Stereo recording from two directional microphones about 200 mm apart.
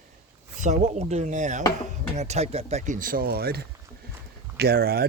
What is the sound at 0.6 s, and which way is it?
Speech, 35° right (ahead or behind).